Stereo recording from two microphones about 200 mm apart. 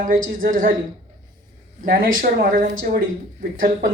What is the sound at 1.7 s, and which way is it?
Speech, 45° right (ahead or behind).